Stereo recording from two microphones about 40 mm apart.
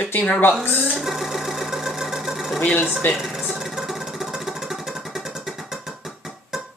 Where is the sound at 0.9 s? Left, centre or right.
Centre.